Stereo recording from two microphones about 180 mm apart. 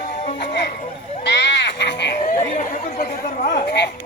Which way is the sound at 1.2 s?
75° left (ahead or behind).